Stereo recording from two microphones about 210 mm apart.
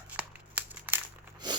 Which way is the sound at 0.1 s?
10° right (ahead or behind).